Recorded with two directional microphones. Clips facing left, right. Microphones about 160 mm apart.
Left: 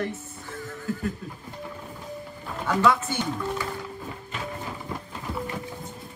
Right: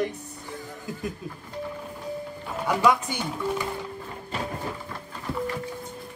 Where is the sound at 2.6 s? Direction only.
15° right (ahead or behind).